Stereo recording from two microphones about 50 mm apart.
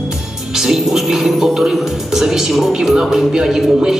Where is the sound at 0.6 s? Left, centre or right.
Centre.